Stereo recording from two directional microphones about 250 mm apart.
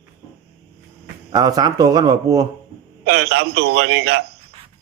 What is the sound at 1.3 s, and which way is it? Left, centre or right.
Speech, centre.